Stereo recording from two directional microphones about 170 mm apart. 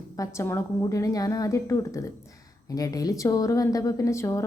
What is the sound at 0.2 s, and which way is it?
A woman's voice, 15° left (ahead or behind).